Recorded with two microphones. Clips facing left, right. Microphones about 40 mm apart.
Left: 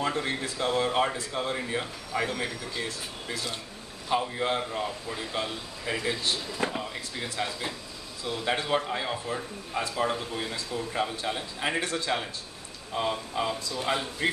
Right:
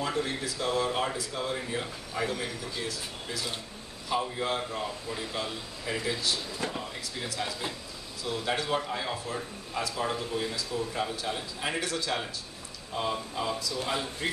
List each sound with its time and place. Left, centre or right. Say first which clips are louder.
0.0 s speech: left 2 dB; left
4.1 s a man's voice: left 2 dB; left
12.9 s a man's voice: left 2 dB; centre
13.7 s a man's voice: left 3 dB; left